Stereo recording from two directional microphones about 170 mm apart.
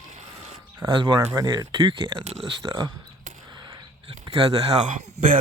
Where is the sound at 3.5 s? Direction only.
25° right (ahead or behind).